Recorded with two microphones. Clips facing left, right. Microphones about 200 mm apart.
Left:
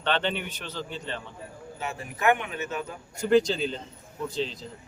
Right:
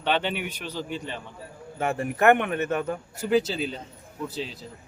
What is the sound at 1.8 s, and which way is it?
Speech, 55° right (ahead or behind).